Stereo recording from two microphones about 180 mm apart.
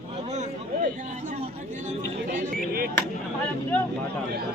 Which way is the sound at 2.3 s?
45° right (ahead or behind).